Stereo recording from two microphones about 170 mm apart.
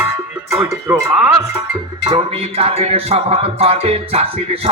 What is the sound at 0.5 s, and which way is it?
Music, 15° right (ahead or behind).